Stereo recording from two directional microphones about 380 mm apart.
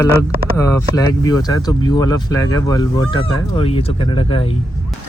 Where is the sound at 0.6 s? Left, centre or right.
Centre.